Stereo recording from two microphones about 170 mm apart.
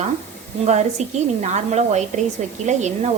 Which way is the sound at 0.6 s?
40° right (ahead or behind).